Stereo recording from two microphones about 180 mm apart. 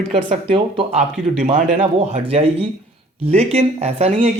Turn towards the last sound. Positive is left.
turn(degrees=-35)  # may be behind; listen again after turning